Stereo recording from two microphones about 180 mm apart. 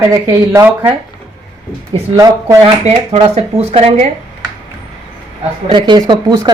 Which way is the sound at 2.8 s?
40° right (ahead or behind).